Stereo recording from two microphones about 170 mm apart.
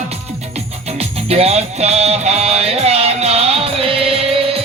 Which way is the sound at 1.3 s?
35° right (ahead or behind).